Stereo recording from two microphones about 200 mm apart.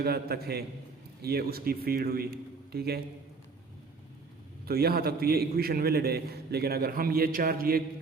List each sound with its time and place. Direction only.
0.0 s a man's voice: 50° right (ahead or behind)
4.6 s a man's voice: 50° right (ahead or behind)